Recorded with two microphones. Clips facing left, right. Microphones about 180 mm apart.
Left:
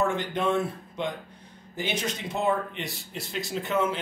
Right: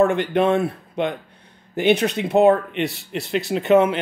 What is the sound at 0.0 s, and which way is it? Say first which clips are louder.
Speech: right 9 dB; 65° right (ahead or behind).